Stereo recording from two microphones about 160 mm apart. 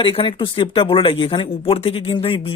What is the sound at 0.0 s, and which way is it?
Speech, 35° left (ahead or behind).